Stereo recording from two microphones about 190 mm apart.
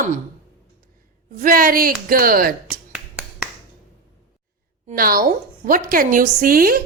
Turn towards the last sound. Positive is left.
turn(degrees=-50)  # may be behind; listen again after turning